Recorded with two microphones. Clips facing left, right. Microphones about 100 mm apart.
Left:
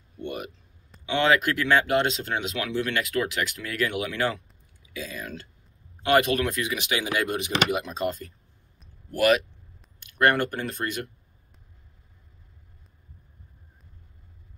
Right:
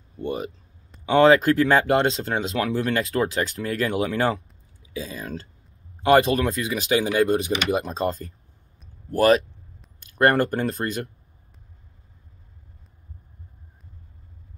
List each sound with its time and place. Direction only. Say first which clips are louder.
0.2 s speech: right 5 dB; 30° right (ahead or behind)